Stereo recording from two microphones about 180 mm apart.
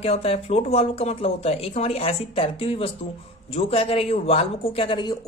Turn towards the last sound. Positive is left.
turn(degrees=25)  # may be behind; listen again after turning